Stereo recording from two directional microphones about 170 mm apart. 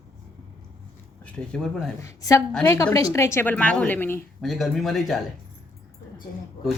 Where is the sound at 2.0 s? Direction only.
20° left (ahead or behind).